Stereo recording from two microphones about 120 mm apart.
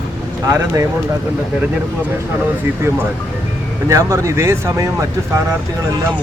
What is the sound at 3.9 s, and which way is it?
Speech, 25° right (ahead or behind).